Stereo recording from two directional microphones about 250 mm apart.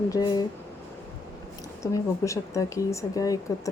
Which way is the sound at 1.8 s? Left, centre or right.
Centre.